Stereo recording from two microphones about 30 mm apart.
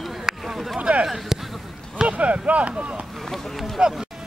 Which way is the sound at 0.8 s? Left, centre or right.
Right.